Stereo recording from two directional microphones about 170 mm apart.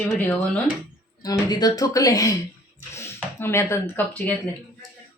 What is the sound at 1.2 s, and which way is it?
Speech, 25° left (ahead or behind).